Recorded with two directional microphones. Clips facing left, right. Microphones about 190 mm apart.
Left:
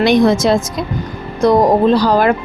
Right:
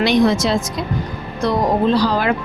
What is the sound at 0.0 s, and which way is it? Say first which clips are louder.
A woman's voice: left 4 dB; 50° left (ahead or behind).